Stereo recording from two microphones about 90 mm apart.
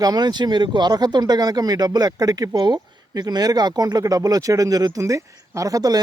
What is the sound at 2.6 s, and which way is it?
Speech, 55° right (ahead or behind).